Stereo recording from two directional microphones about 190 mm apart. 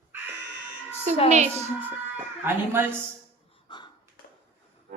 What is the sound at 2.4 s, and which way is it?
Speech, 10° right (ahead or behind).